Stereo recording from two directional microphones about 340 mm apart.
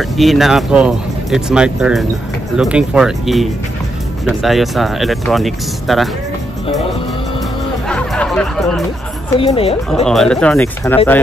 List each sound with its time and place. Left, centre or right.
0.0 s speech: centre
7.9 s music: centre
9.4 s speech: centre
10.0 s speech: centre